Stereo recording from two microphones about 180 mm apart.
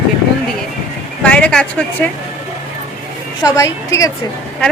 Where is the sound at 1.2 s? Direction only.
5° left (ahead or behind).